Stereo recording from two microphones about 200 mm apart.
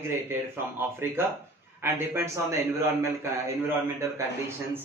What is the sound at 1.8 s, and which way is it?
A man's voice, 10° right (ahead or behind).